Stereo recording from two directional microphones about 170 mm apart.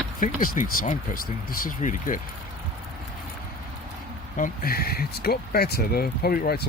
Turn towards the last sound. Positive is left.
turn(degrees=60)  # may be behind; listen again after turning